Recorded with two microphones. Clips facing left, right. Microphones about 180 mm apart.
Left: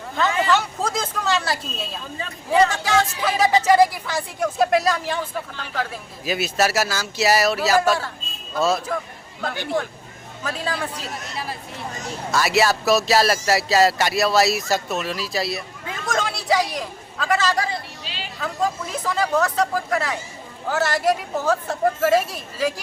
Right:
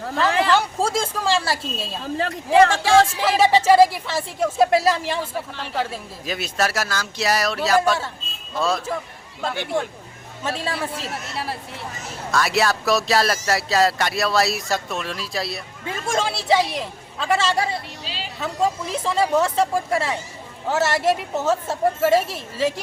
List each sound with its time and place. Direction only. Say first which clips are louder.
0.8 s a man's voice: right 3 dB; 30° right (ahead or behind)
2.1 s speech: right 3 dB; 85° right
2.8 s a man's voice: right 4 dB; 25° right (ahead or behind)
6.2 s speech: left 3 dB; 5° left (ahead or behind)
9.4 s a man's voice: even; 25° right (ahead or behind)
11.1 s speech: right 2 dB; 70° right (ahead or behind)
12.3 s speech: left 1 dB; centre (ahead or behind)
15.9 s a man's voice: right 2 dB; 30° right (ahead or behind)